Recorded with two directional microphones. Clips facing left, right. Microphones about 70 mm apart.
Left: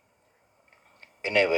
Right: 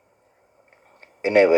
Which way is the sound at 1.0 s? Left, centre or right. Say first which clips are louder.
Right 8 dB; right.